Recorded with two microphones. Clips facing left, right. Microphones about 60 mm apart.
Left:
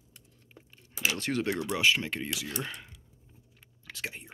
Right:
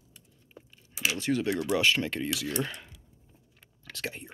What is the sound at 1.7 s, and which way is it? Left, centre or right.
Speech, centre.